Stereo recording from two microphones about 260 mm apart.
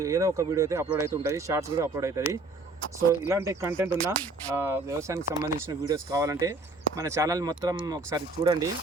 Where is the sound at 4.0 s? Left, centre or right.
Centre.